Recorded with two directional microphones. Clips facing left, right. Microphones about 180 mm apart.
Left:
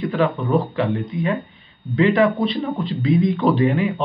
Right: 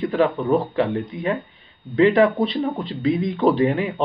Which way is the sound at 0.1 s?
35° right (ahead or behind).